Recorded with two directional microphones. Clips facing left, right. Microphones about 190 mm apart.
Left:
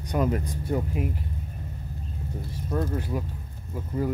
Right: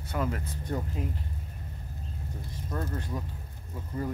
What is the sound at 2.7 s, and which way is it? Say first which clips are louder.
Speech: left 6 dB; 10° left (ahead or behind).